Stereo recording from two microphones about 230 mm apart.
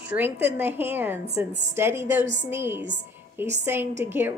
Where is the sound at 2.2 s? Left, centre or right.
Right.